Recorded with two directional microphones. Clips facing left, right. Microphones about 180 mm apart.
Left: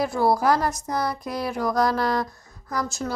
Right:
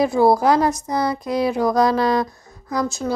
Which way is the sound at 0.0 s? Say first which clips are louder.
Right 6 dB; 20° right (ahead or behind).